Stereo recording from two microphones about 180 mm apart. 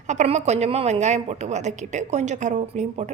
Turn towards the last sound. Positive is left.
turn(degrees=-40)  # may be behind; listen again after turning